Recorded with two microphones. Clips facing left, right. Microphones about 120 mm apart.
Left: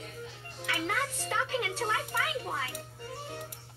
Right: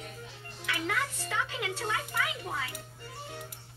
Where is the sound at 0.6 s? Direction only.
35° left (ahead or behind).